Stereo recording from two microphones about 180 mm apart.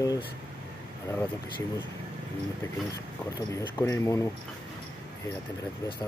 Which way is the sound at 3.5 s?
15° left (ahead or behind).